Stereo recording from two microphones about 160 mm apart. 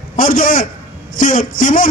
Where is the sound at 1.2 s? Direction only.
55° left (ahead or behind).